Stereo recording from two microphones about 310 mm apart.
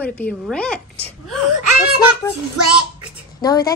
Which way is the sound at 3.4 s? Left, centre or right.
Centre.